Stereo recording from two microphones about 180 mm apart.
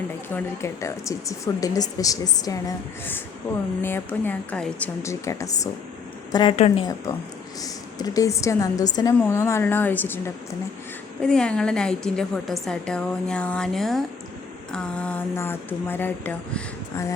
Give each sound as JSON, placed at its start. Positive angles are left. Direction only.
{"t": 0.3, "sound": "a woman's voice", "side_deg": 15}
{"t": 6.3, "sound": "speech", "side_deg": 30}
{"t": 7.6, "sound": "a woman's voice", "side_deg": 20}